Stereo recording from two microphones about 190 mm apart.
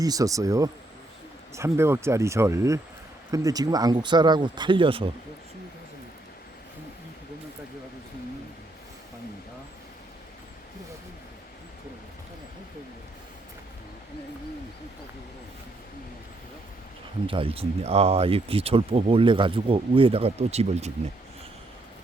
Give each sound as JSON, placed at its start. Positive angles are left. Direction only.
{"t": 0.0, "sound": "speech", "side_deg": -20}
{"t": 17.2, "sound": "speech", "side_deg": -30}